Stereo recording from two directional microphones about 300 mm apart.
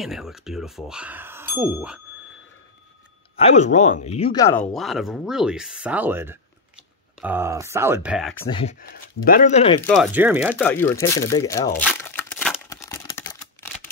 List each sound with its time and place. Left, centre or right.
0.0 s speech: centre
3.3 s speech: left; by 8.5 s centre
8.5 s speech: centre
9.8 s speech: centre
10.5 s speech: centre
11.8 s crumpling: centre